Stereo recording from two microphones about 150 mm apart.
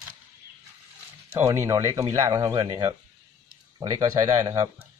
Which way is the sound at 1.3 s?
15° right (ahead or behind).